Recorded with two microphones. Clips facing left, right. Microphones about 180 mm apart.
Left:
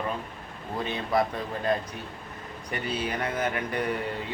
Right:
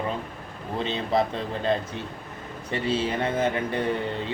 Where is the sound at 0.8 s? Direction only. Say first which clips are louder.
Right 2 dB; 25° right (ahead or behind).